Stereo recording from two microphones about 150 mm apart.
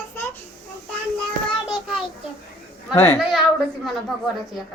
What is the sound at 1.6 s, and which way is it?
Child singing, centre (ahead or behind).